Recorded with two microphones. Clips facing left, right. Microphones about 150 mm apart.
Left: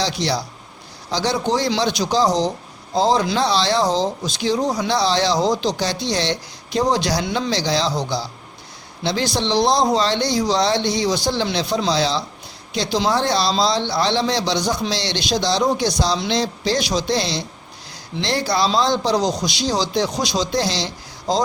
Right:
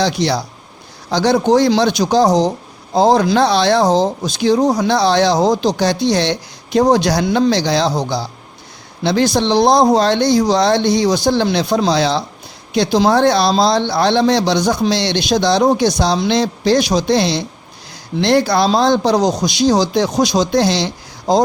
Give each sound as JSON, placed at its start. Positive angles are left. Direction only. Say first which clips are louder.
{"t": 0.0, "sound": "a man's voice", "louder": "right 5 dB", "side_deg": -55}